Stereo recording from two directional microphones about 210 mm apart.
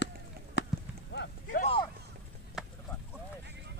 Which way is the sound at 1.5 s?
35° left (ahead or behind).